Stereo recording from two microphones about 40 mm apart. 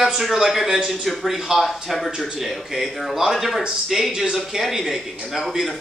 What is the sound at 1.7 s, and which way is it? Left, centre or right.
Speech, centre.